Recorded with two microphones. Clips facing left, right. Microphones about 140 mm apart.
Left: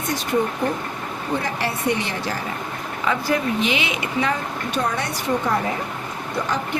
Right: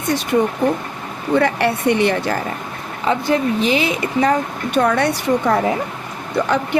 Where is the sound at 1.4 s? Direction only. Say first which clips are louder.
Right 8 dB; 65° right (ahead or behind).